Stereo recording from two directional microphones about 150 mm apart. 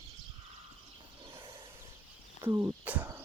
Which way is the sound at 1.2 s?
35° right (ahead or behind).